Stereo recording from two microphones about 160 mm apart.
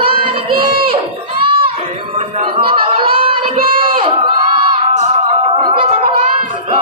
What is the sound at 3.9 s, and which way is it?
Crowd, 35° right (ahead or behind).